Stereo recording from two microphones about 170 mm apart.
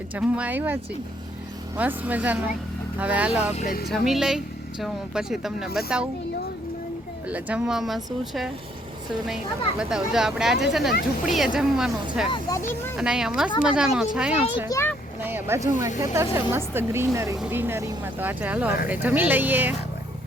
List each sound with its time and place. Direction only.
0.1 s speech: 10° right (ahead or behind)
3.5 s speech: 45° left (ahead or behind)
3.8 s speech: centre (ahead or behind)
7.3 s speech: 10° right (ahead or behind)
12.3 s speech: 20° left (ahead or behind)
13.0 s speech: 5° right (ahead or behind)
14.7 s a child's voice: 15° left (ahead or behind)
15.2 s honk: 10° right (ahead or behind)
16.1 s speech: 15° right (ahead or behind)